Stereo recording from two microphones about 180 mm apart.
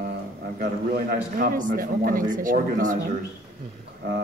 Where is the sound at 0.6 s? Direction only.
55° right (ahead or behind).